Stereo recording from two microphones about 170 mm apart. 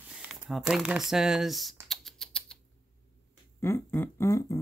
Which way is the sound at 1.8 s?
Centre (ahead or behind).